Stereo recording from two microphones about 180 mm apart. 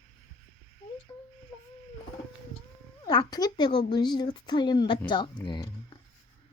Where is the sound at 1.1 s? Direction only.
15° left (ahead or behind).